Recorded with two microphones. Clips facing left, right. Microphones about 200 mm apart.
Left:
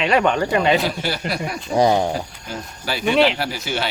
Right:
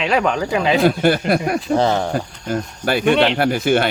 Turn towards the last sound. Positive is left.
turn(degrees=-55)  # may be behind; listen again after turning